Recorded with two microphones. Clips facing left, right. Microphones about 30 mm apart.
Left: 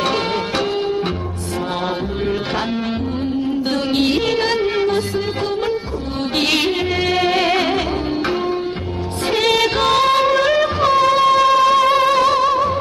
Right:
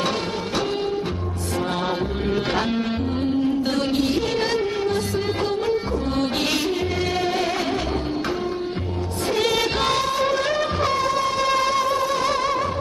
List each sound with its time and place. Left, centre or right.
4.4 s music: left
7.2 s music: left
9.4 s music: left
10.9 s music: left
11.4 s music: left
11.7 s music: left
12.2 s music: left